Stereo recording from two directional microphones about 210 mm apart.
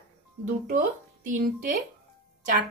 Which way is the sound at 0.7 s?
40° right (ahead or behind).